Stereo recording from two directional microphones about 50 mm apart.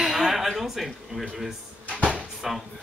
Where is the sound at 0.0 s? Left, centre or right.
Centre.